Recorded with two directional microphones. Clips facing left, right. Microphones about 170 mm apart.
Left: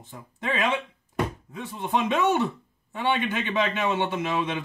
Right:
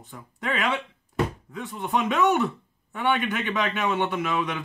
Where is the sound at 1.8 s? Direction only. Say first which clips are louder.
Right 1 dB; 25° left (ahead or behind).